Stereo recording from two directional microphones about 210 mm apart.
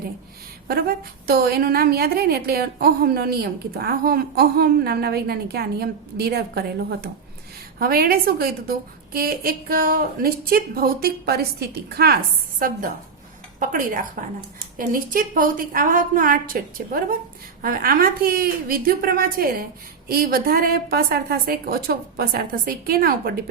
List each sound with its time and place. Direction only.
0.7 s a woman's voice: 45° right (ahead or behind)